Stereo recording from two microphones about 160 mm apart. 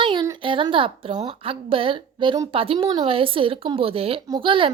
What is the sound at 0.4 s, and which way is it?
Speech, 35° right (ahead or behind).